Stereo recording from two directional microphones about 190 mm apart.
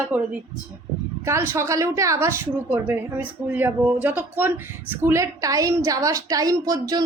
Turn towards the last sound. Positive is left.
turn(degrees=-20)  # may be behind; listen again after turning